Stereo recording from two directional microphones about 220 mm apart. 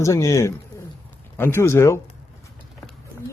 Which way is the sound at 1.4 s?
10° left (ahead or behind).